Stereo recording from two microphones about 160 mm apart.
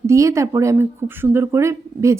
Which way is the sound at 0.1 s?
20° right (ahead or behind).